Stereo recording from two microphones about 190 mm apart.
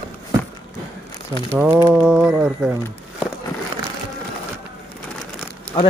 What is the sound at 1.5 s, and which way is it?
Speech, 5° right (ahead or behind).